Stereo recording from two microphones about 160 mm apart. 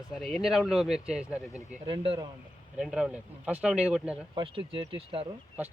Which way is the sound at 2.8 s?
5° right (ahead or behind).